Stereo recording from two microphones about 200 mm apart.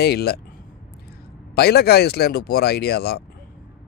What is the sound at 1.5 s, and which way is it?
Speech, 55° left (ahead or behind).